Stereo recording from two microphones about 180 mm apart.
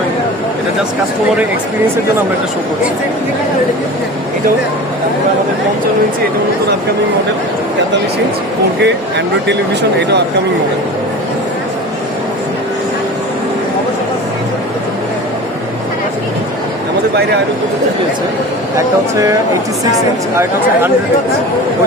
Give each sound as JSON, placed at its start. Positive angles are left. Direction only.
{"t": 8.8, "sound": "speech", "side_deg": -70}